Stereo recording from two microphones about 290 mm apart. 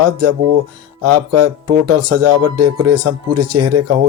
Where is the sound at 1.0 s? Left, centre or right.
Right.